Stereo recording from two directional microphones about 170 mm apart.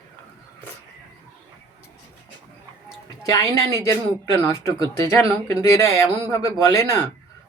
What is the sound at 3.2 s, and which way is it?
Speech, 20° left (ahead or behind).